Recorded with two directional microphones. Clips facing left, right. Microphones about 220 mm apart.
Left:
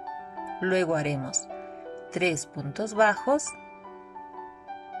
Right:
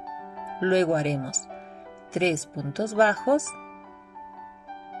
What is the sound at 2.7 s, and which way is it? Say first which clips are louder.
Speech: right 2 dB; 30° right (ahead or behind).